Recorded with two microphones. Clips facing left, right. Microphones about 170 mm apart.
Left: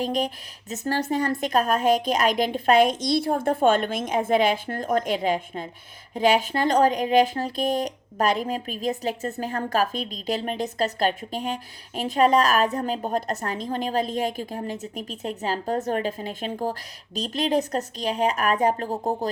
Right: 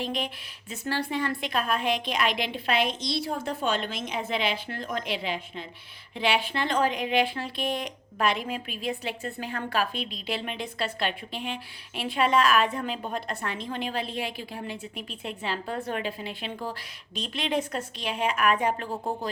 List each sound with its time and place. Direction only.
0.0 s a woman's voice: 40° left (ahead or behind)